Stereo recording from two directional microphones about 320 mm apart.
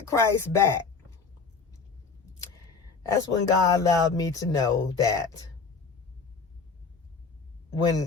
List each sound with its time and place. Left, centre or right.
0.1 s speech: centre
3.1 s speech: centre